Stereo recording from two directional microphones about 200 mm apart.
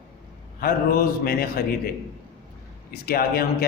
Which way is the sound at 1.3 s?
50° left (ahead or behind).